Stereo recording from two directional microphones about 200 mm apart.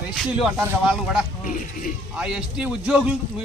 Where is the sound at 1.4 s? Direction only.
40° left (ahead or behind).